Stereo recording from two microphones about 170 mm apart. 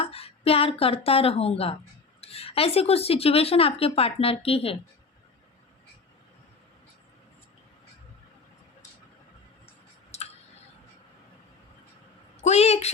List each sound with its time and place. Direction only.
0.0 s speech: 35° left (ahead or behind)
10.1 s tick: 40° left (ahead or behind)
12.4 s a woman's voice: 40° left (ahead or behind)